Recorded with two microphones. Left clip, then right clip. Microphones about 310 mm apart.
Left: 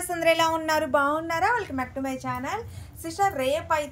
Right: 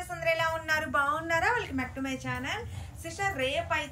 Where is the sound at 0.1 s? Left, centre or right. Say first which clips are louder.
Left 7 dB; left.